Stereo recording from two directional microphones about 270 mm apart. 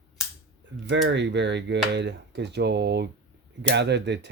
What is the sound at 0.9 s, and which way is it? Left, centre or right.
Speech, right.